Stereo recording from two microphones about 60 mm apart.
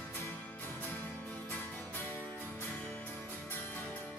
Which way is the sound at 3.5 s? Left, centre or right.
Left.